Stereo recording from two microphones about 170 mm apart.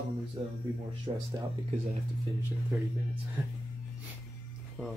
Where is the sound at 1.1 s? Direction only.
35° right (ahead or behind).